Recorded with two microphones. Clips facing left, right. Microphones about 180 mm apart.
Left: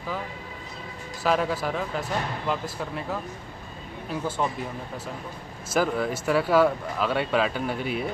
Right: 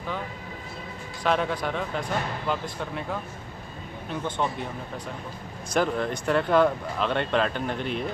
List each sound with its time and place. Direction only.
1.2 s speech: 5° left (ahead or behind)
5.7 s speech: 5° left (ahead or behind)